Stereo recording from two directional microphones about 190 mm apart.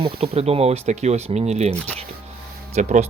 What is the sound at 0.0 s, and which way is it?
Speech, 30° right (ahead or behind).